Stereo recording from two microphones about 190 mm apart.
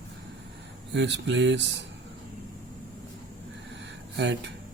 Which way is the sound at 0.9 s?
70° right (ahead or behind).